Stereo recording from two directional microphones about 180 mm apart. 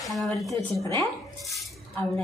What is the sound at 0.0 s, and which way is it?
Speech, centre (ahead or behind).